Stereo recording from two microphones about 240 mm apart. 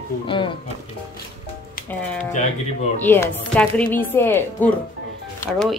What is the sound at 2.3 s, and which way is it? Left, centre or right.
Speech, left.